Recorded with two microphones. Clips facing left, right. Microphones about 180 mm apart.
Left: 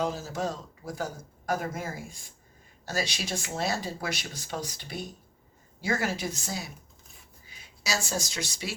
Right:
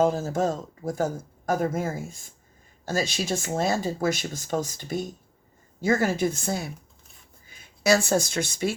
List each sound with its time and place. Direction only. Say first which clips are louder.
0.0 s speech: right 8 dB; 50° right (ahead or behind)